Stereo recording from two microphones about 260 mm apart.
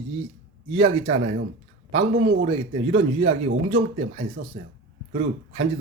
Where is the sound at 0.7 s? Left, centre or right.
Right.